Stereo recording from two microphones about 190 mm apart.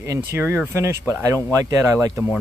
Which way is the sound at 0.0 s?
15° right (ahead or behind).